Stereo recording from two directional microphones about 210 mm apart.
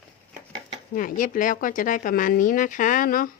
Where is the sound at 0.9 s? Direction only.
40° left (ahead or behind).